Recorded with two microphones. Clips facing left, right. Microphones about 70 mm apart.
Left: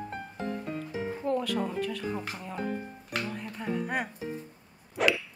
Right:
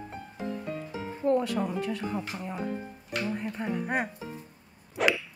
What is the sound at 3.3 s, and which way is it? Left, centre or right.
Speech, right.